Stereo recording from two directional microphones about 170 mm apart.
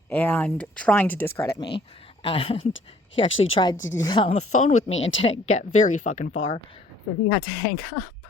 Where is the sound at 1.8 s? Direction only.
30° left (ahead or behind).